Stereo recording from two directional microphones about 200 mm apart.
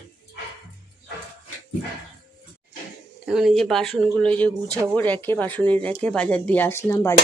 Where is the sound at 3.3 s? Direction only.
Centre (ahead or behind).